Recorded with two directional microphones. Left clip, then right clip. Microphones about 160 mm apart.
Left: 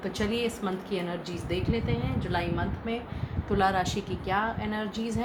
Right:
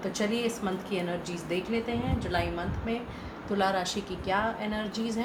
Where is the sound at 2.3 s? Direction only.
40° left (ahead or behind).